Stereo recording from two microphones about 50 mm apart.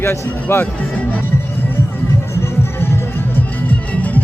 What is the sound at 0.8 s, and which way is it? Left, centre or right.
Music, left.